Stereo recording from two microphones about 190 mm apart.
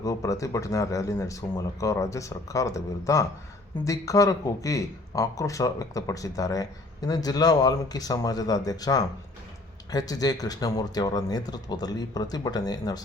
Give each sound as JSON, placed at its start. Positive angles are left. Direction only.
{"t": 0.0, "sound": "speech", "side_deg": 15}